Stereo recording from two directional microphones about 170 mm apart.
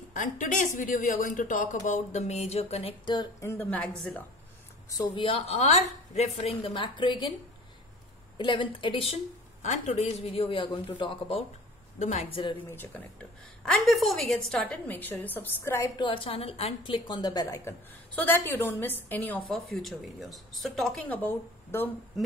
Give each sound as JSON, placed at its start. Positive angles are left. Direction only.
{"t": 0.1, "sound": "speech", "side_deg": 50}
{"t": 3.4, "sound": "a woman's voice", "side_deg": 10}
{"t": 5.1, "sound": "a woman's voice", "side_deg": 30}
{"t": 8.4, "sound": "a woman's voice", "side_deg": 30}
{"t": 12.0, "sound": "a woman's voice", "side_deg": 40}
{"t": 12.7, "sound": "a woman's voice", "side_deg": 10}
{"t": 13.7, "sound": "a woman's voice", "side_deg": 0}
{"t": 16.0, "sound": "a woman's voice", "side_deg": 30}